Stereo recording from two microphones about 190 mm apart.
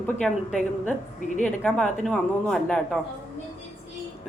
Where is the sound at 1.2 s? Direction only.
40° left (ahead or behind).